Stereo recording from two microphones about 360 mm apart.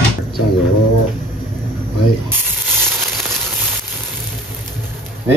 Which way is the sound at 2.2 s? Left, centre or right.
Centre.